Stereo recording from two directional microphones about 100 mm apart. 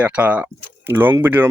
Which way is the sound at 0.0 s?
15° right (ahead or behind).